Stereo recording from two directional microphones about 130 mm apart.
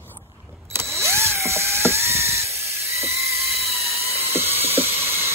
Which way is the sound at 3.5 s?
50° right (ahead or behind).